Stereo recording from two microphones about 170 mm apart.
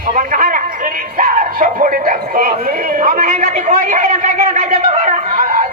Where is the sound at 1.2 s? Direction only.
50° right (ahead or behind).